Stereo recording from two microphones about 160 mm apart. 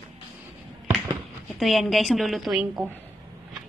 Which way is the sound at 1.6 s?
Centre (ahead or behind).